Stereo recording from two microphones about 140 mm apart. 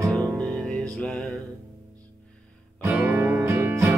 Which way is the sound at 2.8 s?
15° right (ahead or behind).